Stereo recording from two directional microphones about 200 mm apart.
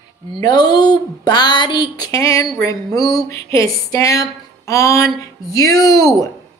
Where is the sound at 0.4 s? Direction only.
20° left (ahead or behind).